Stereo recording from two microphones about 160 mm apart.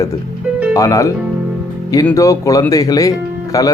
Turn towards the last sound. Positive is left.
turn(degrees=20)  # may be behind; listen again after turning